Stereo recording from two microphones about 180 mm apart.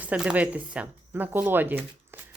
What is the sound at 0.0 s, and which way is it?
Speech, 5° right (ahead or behind).